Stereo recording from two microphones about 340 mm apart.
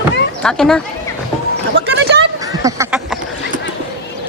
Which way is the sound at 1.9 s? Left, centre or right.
Right.